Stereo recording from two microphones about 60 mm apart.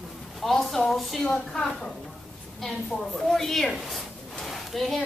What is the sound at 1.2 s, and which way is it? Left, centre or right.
A woman's voice, centre.